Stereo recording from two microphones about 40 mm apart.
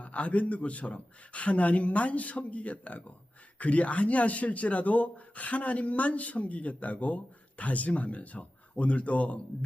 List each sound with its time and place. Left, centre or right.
0.0 s a man's voice: left